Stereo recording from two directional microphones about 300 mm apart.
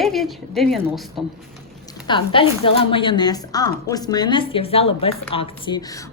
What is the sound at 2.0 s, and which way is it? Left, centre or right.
A woman's voice, centre.